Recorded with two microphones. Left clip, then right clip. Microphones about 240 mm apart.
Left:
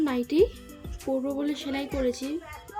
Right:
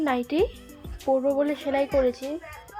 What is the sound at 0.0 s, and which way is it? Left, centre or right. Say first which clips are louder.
Speech: even; centre.